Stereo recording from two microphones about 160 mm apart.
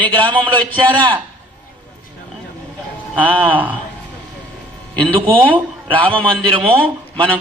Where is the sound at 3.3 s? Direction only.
30° right (ahead or behind).